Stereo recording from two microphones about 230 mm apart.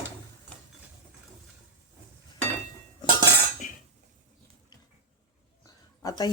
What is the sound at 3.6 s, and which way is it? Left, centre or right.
Cough, left.